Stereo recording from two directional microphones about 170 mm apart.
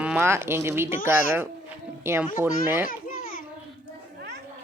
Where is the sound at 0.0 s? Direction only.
10° right (ahead or behind).